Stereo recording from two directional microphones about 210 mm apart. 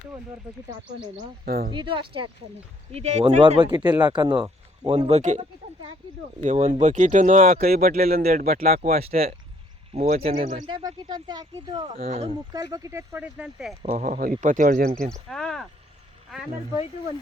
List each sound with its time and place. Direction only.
1.5 s speech: 45° right (ahead or behind)
1.7 s speech: 25° right (ahead or behind)
6.4 s speech: 35° right (ahead or behind)
9.0 s speech: 30° right (ahead or behind)
10.7 s speech: 25° right (ahead or behind)
12.7 s speech: 15° right (ahead or behind)
13.8 s speech: 35° right (ahead or behind)
15.3 s speech: 5° left (ahead or behind)